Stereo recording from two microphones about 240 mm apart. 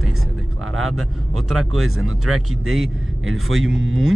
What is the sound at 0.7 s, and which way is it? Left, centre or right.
Speech, right.